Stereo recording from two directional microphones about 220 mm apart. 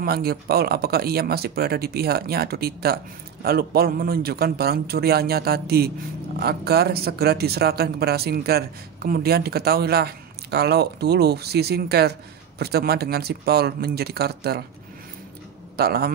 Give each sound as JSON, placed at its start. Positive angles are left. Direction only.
{"t": 0.0, "sound": "speech", "side_deg": -45}
{"t": 15.7, "sound": "a man's voice", "side_deg": -45}